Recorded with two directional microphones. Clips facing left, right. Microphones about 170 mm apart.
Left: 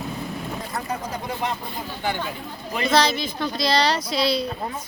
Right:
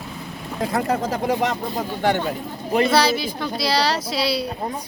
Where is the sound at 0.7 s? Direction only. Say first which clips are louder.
Right 9 dB; 90° right.